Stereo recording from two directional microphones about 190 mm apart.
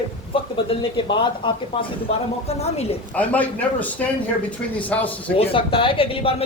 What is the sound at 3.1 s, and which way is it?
A man's voice, 10° left (ahead or behind).